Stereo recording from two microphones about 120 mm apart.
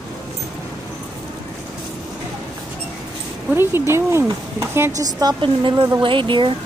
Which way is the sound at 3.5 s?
20° right (ahead or behind).